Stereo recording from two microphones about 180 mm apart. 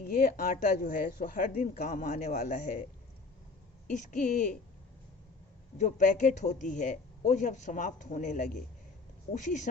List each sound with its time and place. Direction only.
0.0 s speech: 55° left (ahead or behind)
3.8 s speech: 45° left (ahead or behind)
5.7 s speech: 45° left (ahead or behind)